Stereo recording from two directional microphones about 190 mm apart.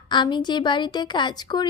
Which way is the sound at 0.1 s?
25° left (ahead or behind).